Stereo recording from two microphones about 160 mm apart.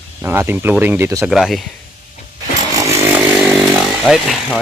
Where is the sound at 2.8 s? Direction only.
20° right (ahead or behind).